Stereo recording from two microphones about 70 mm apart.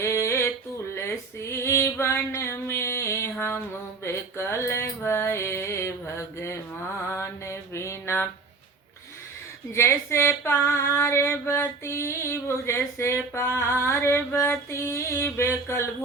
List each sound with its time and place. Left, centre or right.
0.0 s a sound: left
0.9 s female singing: left
7.1 s mantra: left
9.7 s female singing: left